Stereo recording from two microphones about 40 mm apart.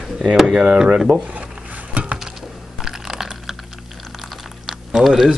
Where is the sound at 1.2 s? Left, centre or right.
Right.